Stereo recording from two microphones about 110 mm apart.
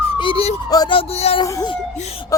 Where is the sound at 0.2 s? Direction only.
55° left (ahead or behind).